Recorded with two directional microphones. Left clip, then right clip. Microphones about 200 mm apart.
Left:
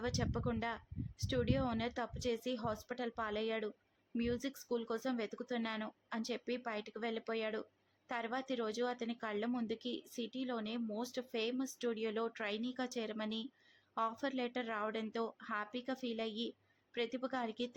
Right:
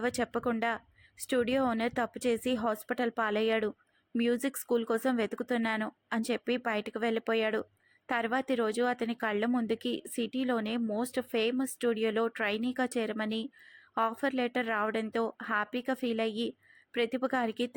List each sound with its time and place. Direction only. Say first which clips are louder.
0.0 s a woman's voice: right 8 dB; 25° right (ahead or behind)